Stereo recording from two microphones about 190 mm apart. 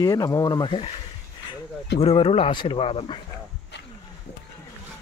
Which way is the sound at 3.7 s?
65° left (ahead or behind).